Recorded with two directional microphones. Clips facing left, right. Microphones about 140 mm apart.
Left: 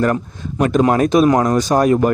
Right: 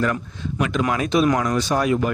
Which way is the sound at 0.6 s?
40° left (ahead or behind).